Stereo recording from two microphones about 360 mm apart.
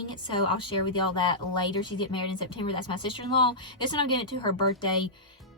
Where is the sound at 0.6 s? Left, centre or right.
Centre.